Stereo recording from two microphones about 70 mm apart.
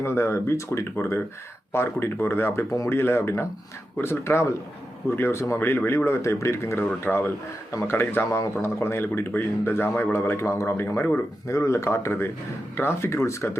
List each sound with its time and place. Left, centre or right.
0.0 s a man's voice: left
2.9 s a man's voice: left
5.5 s a man's voice: left
11.4 s a man's voice: left